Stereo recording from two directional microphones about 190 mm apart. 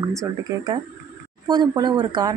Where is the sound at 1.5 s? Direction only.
20° right (ahead or behind).